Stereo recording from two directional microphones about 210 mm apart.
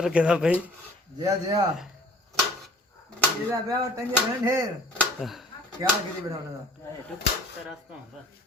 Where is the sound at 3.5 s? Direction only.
15° right (ahead or behind).